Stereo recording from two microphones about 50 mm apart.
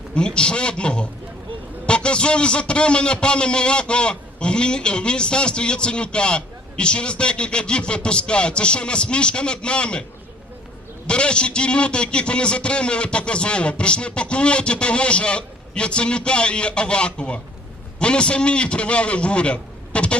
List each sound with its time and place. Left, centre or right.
0.1 s a man's voice: centre
11.0 s a man's voice: centre